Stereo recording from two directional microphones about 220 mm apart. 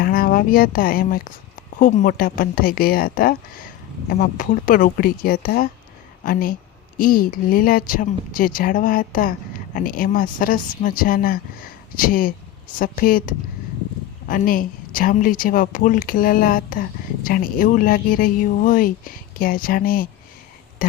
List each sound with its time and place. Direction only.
0.0 s a woman's voice: 40° left (ahead or behind)